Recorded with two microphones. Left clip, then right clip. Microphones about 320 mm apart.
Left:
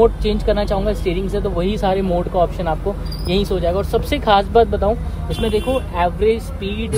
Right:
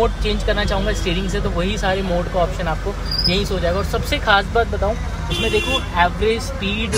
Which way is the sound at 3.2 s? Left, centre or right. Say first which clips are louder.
Left 2 dB; left.